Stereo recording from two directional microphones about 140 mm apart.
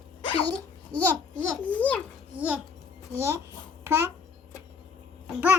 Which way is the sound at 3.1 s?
20° right (ahead or behind).